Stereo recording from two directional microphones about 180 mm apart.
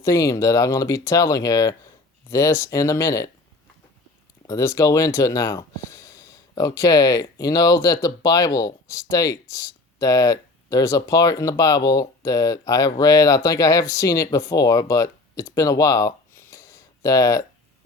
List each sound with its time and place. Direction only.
0.0 s speech: 15° left (ahead or behind)
4.4 s speech: 15° left (ahead or behind)